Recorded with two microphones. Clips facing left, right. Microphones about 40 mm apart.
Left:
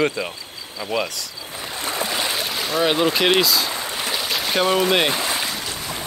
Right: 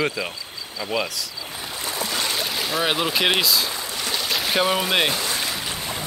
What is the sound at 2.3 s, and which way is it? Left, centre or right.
Speech, centre.